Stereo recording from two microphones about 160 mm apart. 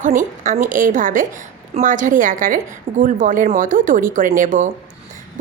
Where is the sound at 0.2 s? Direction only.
50° right (ahead or behind).